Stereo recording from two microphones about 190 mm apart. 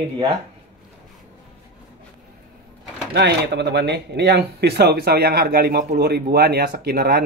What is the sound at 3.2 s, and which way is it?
Speech, 60° right (ahead or behind).